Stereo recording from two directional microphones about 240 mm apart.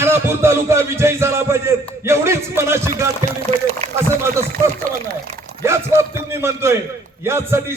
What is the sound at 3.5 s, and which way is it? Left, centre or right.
Speech, right.